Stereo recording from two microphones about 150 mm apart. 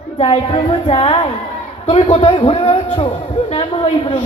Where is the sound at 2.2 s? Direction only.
35° left (ahead or behind).